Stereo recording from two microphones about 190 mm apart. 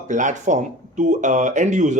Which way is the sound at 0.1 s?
40° right (ahead or behind).